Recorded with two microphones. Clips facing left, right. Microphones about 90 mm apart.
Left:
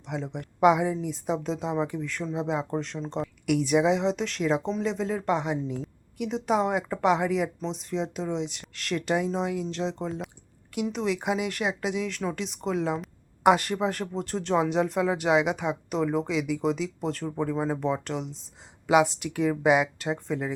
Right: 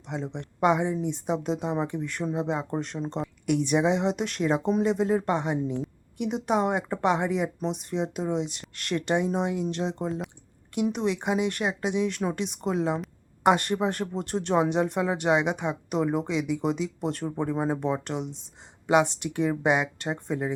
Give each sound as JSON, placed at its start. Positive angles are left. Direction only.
{"t": 0.1, "sound": "speech", "side_deg": 0}
{"t": 2.0, "sound": "speech", "side_deg": -15}
{"t": 2.3, "sound": "speech", "side_deg": 0}
{"t": 16.0, "sound": "speech", "side_deg": -15}
{"t": 16.2, "sound": "speech", "side_deg": 0}
{"t": 17.2, "sound": "speech", "side_deg": -15}
{"t": 17.8, "sound": "speech", "side_deg": -5}